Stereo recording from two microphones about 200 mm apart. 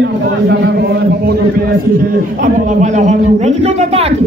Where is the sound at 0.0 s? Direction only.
60° right (ahead or behind).